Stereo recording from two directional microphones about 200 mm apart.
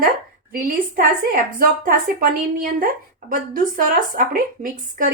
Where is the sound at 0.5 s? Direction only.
45° right (ahead or behind).